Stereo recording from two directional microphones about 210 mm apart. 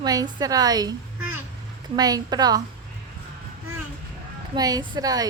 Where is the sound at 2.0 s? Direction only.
20° right (ahead or behind).